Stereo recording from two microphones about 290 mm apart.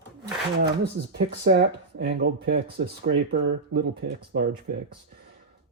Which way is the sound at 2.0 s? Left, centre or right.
Right.